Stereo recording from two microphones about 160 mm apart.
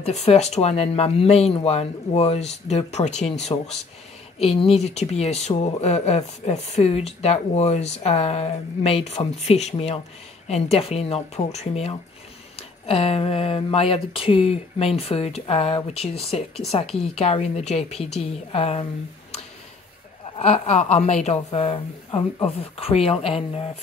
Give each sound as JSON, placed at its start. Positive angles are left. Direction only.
{"t": 0.0, "sound": "speech", "side_deg": 40}
{"t": 16.8, "sound": "a woman's voice", "side_deg": 5}
{"t": 17.2, "sound": "speech", "side_deg": 40}
{"t": 20.3, "sound": "speech", "side_deg": 40}